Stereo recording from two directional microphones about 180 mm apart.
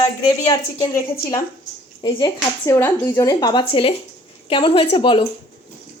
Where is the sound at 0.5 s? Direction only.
20° left (ahead or behind).